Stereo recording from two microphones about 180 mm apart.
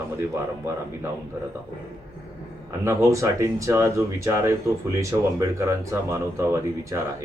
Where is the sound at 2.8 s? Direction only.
15° right (ahead or behind).